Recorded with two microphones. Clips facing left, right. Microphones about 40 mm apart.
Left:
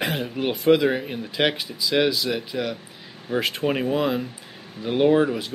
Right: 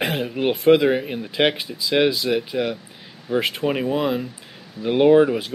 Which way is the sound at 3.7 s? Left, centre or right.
Centre.